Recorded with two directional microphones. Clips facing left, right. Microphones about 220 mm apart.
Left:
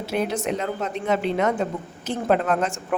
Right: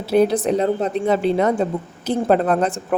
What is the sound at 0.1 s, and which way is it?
Speech, 35° right (ahead or behind).